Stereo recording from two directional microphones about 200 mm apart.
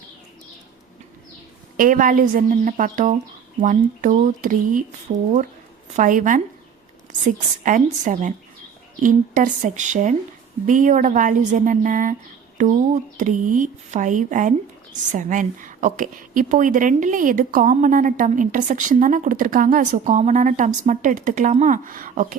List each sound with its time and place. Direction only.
1.7 s a woman's voice: 40° right (ahead or behind)